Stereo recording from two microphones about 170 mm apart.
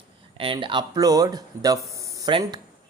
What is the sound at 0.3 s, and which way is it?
Speech, 30° right (ahead or behind).